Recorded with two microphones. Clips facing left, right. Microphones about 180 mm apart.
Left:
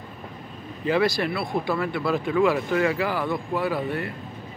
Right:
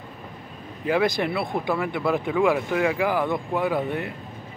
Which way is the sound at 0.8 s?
15° right (ahead or behind).